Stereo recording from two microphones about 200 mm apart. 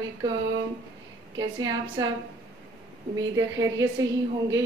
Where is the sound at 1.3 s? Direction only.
20° right (ahead or behind).